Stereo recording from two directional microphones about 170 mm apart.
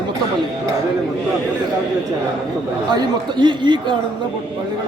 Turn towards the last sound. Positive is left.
turn(degrees=-25)  # may be behind; listen again after turning